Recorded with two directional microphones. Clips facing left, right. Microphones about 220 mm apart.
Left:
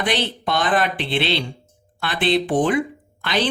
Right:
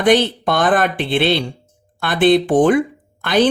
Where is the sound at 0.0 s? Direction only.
50° right (ahead or behind).